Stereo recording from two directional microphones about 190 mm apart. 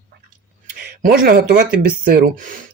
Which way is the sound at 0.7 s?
50° right (ahead or behind).